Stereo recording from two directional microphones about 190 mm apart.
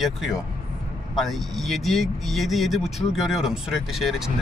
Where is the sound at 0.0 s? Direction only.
Centre (ahead or behind).